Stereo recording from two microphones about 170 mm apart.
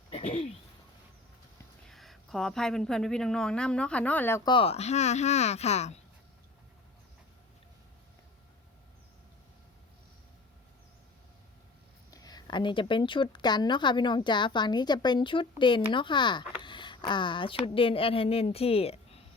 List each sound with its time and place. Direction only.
0.1 s a sound: 35° left (ahead or behind)
1.9 s speech: centre (ahead or behind)
4.4 s speech: 30° left (ahead or behind)
12.1 s a woman's voice: 25° left (ahead or behind)